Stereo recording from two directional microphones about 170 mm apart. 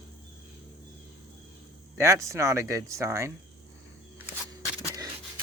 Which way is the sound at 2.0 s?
20° right (ahead or behind).